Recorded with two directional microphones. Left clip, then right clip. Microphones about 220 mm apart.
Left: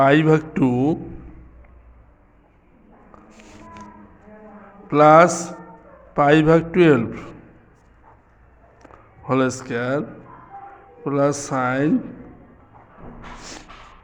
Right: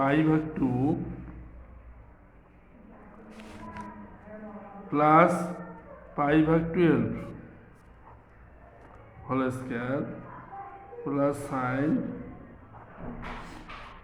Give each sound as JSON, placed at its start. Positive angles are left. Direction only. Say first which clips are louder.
{"t": 0.0, "sound": "a man's voice", "louder": "left 10 dB", "side_deg": 55}
{"t": 4.9, "sound": "a man's voice", "louder": "left 9 dB", "side_deg": 55}
{"t": 9.2, "sound": "speech", "louder": "left 9 dB", "side_deg": 55}
{"t": 11.0, "sound": "a man's voice", "louder": "left 8 dB", "side_deg": 55}